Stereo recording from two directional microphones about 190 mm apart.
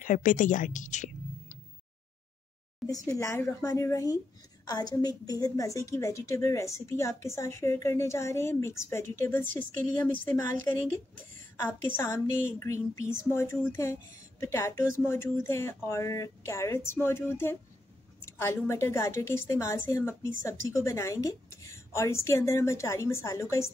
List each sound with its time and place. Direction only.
0.0 s a woman's voice: 45° left (ahead or behind)
2.9 s a woman's voice: 15° left (ahead or behind)